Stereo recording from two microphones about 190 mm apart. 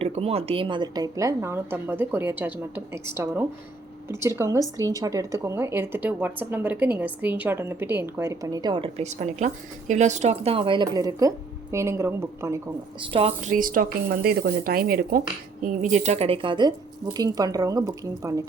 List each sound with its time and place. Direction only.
0.0 s a woman's voice: 30° right (ahead or behind); by 12.6 s 15° right (ahead or behind)
13.0 s a woman's voice: 30° right (ahead or behind)